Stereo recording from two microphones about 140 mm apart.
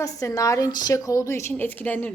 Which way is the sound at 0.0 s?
25° left (ahead or behind).